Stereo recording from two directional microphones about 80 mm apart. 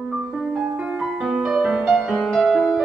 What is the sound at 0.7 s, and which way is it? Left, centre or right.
Music, centre.